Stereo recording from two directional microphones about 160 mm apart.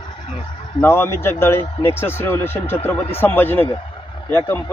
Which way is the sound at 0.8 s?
15° left (ahead or behind).